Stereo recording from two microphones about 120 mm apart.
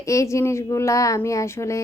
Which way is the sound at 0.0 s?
25° left (ahead or behind).